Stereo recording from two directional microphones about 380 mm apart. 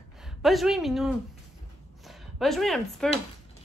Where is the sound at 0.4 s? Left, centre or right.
Centre.